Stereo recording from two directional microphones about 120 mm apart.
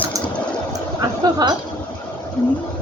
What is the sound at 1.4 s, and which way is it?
Speech, 35° right (ahead or behind).